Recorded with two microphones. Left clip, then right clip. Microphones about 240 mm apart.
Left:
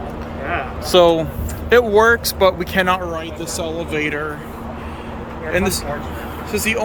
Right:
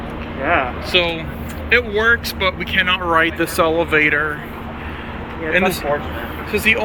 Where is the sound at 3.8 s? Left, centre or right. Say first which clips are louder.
Right 4 dB; centre.